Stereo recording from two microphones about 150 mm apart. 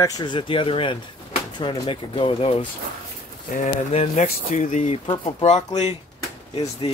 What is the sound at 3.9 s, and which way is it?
Speech, 45° left (ahead or behind).